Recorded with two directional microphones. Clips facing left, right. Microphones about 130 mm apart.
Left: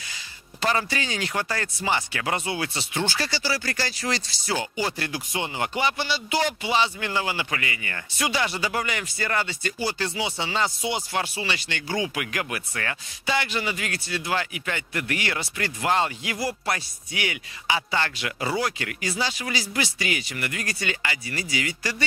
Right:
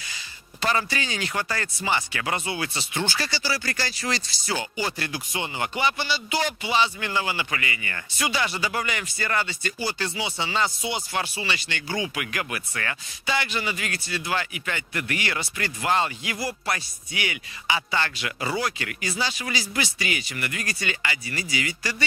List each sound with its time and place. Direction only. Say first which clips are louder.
0.6 s speech: left 1 dB; 35° left (ahead or behind)